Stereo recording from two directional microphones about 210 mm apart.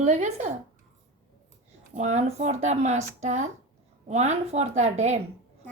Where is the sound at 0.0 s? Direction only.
35° right (ahead or behind).